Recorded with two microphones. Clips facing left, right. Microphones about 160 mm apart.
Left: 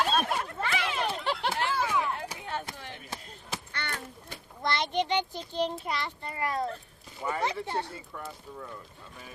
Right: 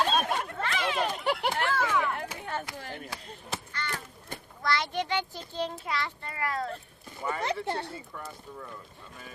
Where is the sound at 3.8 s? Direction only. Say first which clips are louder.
Right 2 dB; 65° left (ahead or behind).